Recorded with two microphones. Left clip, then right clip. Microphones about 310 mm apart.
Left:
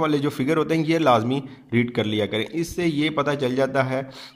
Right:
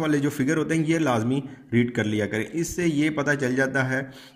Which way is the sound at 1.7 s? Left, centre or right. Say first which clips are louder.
Left 1 dB; centre.